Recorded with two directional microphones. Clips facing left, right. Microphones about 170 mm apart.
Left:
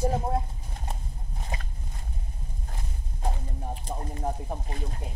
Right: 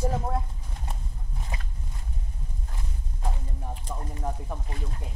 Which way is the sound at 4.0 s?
35° left (ahead or behind).